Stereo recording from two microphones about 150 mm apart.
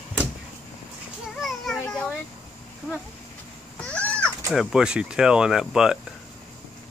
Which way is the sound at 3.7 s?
10° left (ahead or behind).